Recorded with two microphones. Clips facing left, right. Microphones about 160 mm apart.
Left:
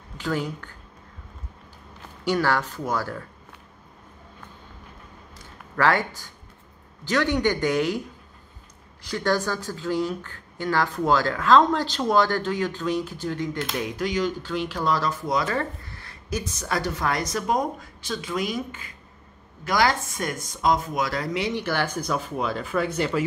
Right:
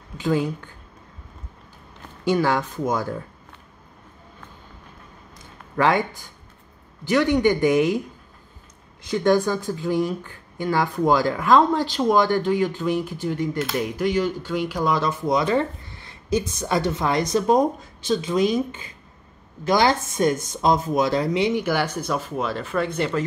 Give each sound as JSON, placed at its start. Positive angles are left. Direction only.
{"t": 0.2, "sound": "speech", "side_deg": -15}
{"t": 2.2, "sound": "speech", "side_deg": -15}
{"t": 5.8, "sound": "speech", "side_deg": -15}
{"t": 9.1, "sound": "speech", "side_deg": -15}
{"t": 21.6, "sound": "speech", "side_deg": -10}